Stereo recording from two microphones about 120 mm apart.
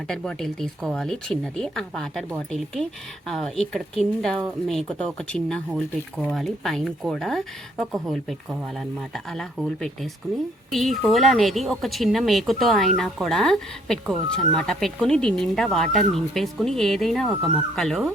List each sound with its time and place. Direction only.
0.1 s speech: 5° left (ahead or behind)
3.2 s speech: 5° left (ahead or behind)